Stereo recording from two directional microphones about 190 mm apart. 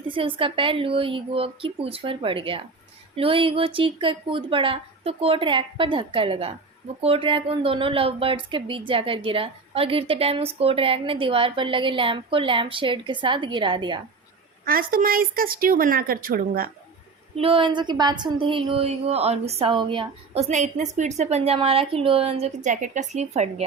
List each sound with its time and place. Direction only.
0.1 s a woman's voice: 25° right (ahead or behind)
14.6 s a woman's voice: 50° right (ahead or behind)
17.3 s a woman's voice: 30° right (ahead or behind)
20.5 s a woman's voice: 40° right (ahead or behind)